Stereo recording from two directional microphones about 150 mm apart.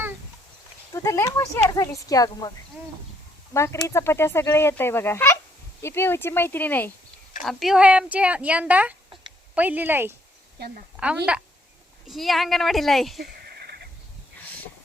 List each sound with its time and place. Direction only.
0.9 s speech: 20° left (ahead or behind)
3.5 s speech: 20° left (ahead or behind)
7.4 s a woman's voice: centre (ahead or behind)
13.5 s horse: 90° right